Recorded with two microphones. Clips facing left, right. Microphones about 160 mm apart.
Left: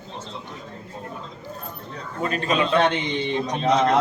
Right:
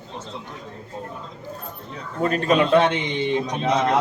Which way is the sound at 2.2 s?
45° right (ahead or behind).